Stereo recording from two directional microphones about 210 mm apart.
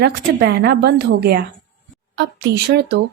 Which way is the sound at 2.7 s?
50° right (ahead or behind).